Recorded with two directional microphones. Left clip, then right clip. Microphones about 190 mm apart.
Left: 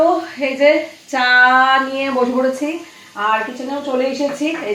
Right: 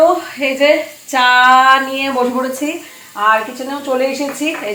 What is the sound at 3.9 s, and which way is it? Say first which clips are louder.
Speech: right 3 dB; 5° left (ahead or behind).